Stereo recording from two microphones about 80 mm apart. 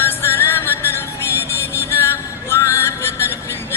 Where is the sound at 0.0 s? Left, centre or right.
Left.